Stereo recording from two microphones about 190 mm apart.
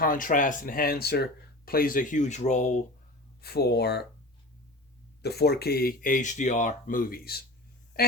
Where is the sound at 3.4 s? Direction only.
55° left (ahead or behind).